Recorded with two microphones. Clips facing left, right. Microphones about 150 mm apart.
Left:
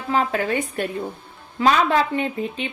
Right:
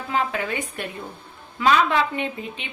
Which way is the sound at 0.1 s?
40° left (ahead or behind).